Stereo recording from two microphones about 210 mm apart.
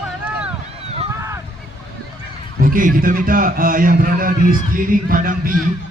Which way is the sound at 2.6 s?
40° right (ahead or behind).